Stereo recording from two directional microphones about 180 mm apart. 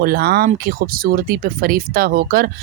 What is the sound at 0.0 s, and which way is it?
Speech, 60° right (ahead or behind).